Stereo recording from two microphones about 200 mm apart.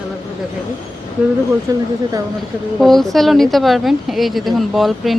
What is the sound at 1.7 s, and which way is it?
Speech, 15° right (ahead or behind).